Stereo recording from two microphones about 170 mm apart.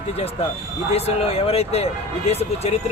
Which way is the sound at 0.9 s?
35° left (ahead or behind).